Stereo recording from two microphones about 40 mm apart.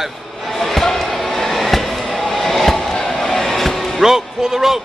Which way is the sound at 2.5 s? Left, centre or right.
Centre.